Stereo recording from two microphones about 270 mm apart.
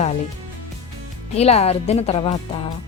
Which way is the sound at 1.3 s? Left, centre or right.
Left.